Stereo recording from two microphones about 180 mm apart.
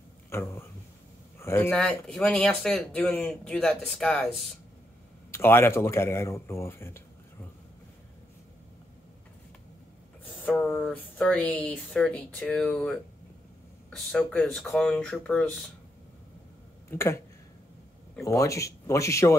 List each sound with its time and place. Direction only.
0.3 s speech: 15° left (ahead or behind)
5.3 s speech: 15° left (ahead or behind)
10.2 s speech: 5° left (ahead or behind)
16.9 s speech: 15° left (ahead or behind)
18.2 s speech: 15° left (ahead or behind)